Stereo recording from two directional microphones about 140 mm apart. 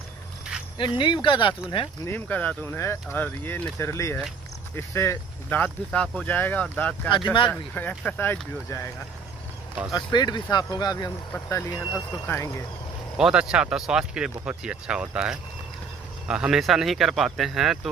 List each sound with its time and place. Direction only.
0.7 s speech: 35° left (ahead or behind)
2.0 s speech: 10° left (ahead or behind)
3.7 s speech: 20° left (ahead or behind)
9.9 s speech: 30° left (ahead or behind)
11.3 s speech: 15° left (ahead or behind)
11.6 s speech: 30° left (ahead or behind)
13.2 s speech: 5° right (ahead or behind)